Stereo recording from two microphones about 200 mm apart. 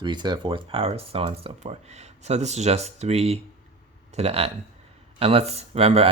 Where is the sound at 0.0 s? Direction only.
20° right (ahead or behind).